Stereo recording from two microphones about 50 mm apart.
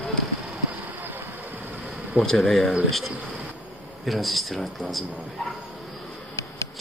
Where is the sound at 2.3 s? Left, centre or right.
Centre.